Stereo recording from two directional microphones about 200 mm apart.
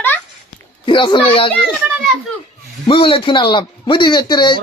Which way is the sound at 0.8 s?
25° left (ahead or behind).